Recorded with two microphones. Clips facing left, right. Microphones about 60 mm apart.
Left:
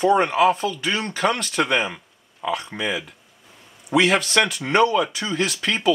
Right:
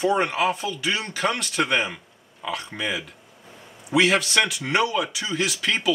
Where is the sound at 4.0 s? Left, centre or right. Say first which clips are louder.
Even; left.